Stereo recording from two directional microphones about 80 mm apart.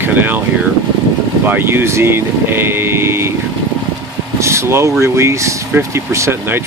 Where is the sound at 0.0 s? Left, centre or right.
Right.